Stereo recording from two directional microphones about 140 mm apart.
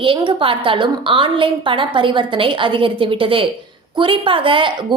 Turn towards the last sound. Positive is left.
turn(degrees=-35)  # may be behind; listen again after turning